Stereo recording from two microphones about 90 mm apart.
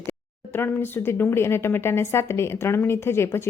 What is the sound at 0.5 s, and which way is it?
Speech, 25° left (ahead or behind).